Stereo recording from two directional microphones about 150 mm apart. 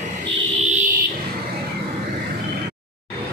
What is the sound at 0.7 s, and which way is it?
Fire alarm, 60° right (ahead or behind).